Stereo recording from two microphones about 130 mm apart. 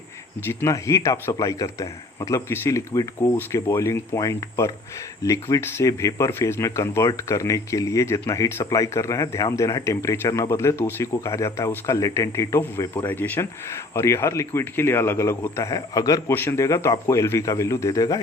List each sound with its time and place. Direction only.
0.4 s speech: 20° left (ahead or behind)